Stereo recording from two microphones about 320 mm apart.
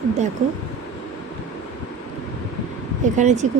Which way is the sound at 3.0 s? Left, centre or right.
Right.